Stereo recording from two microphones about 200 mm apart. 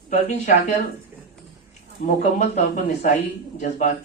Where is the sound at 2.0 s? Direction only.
40° left (ahead or behind).